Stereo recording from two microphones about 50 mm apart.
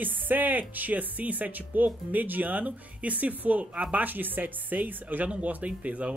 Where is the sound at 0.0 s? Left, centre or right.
Right.